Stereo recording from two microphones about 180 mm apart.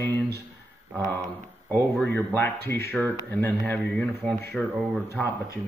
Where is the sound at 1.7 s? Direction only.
10° left (ahead or behind).